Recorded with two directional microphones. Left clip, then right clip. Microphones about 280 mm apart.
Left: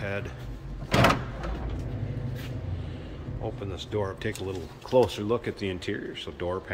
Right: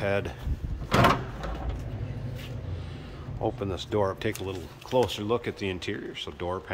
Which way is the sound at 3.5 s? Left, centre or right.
Right.